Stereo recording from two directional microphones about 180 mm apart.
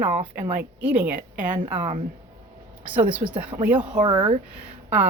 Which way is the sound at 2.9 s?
10° right (ahead or behind).